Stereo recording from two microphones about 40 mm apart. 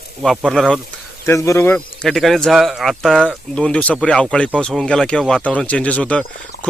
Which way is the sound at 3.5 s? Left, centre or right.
Left.